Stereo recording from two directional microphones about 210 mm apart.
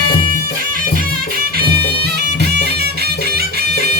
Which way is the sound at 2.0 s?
50° right (ahead or behind).